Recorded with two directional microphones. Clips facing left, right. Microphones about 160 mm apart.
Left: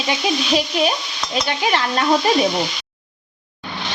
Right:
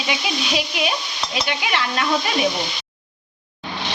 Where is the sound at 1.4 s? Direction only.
40° left (ahead or behind).